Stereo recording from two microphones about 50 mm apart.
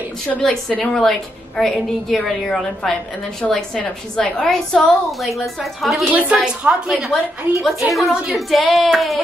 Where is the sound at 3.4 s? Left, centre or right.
Left.